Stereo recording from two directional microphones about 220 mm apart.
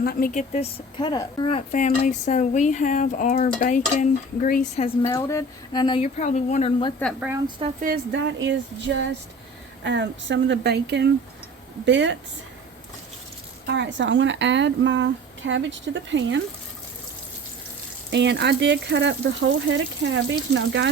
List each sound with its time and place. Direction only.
0.0 s speech: 45° left (ahead or behind)
0.9 s speech: 20° left (ahead or behind); by 4.9 s 35° left (ahead or behind)
5.0 s speech: 15° left (ahead or behind)
7.0 s speech: centre (ahead or behind)
7.8 s a woman's voice: 40° right (ahead or behind)
8.4 s a woman's voice: 55° right (ahead or behind)
13.7 s a woman's voice: 55° right (ahead or behind)
18.1 s speech: 50° right (ahead or behind)